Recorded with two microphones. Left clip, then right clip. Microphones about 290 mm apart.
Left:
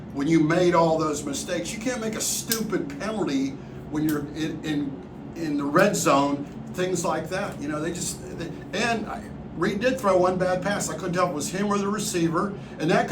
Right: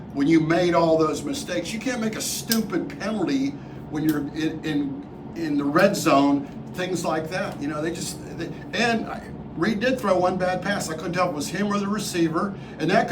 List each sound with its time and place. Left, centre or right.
0.2 s a man's voice: centre